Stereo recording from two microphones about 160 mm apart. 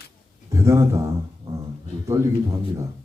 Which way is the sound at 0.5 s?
20° right (ahead or behind).